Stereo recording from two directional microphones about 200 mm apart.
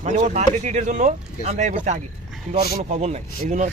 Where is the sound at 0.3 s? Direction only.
35° right (ahead or behind).